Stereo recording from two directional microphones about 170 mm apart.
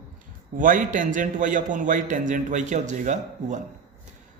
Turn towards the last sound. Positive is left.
turn(degrees=-45)  # may be behind; listen again after turning